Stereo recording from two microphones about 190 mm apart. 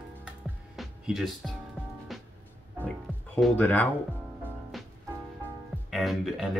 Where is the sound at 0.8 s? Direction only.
Centre (ahead or behind).